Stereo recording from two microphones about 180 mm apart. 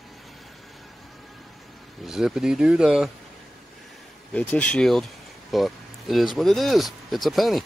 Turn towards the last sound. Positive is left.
turn(degrees=0)  # may be behind; listen again after turning